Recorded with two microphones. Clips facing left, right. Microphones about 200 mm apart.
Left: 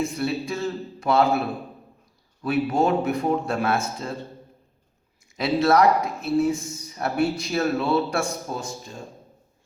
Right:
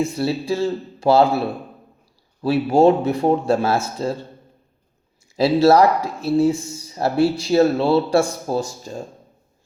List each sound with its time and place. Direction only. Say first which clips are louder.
0.0 s speech: right 4 dB; 30° right (ahead or behind)
2.4 s speech: right 7 dB; 30° right (ahead or behind)
5.4 s speech: right 6 dB; 30° right (ahead or behind)
5.8 s speech: right 2 dB; centre (ahead or behind)
6.2 s speech: right 5 dB; 30° right (ahead or behind)